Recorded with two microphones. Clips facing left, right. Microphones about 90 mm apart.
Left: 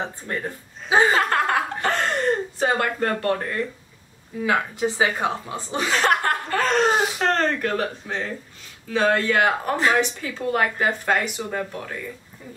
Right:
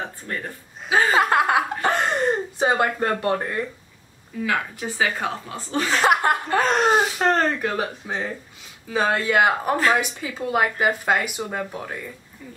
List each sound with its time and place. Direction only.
0.3 s speech: 25° left (ahead or behind)
1.1 s chuckle: 10° right (ahead or behind)
4.5 s speech: 20° left (ahead or behind)
5.9 s speech: 5° right (ahead or behind)
6.2 s chuckle: 20° right (ahead or behind)
7.0 s speech: 10° right (ahead or behind)